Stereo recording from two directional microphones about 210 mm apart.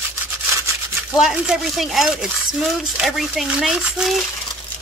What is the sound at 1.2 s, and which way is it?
Speech, centre (ahead or behind).